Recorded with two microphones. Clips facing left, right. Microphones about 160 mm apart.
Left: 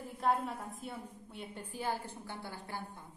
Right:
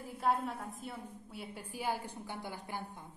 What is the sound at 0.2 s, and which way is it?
A woman's voice, centre (ahead or behind).